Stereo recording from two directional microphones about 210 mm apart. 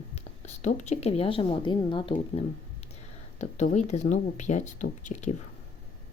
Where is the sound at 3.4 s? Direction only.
35° left (ahead or behind).